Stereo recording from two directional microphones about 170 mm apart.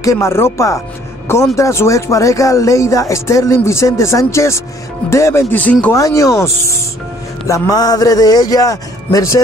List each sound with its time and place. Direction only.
0.0 s speech: 20° left (ahead or behind)
5.9 s speech: 20° left (ahead or behind)